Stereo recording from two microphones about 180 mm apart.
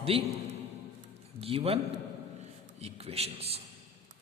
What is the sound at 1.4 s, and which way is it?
Speech, 30° right (ahead or behind).